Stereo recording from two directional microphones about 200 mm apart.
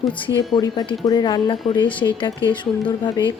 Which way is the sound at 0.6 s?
20° left (ahead or behind).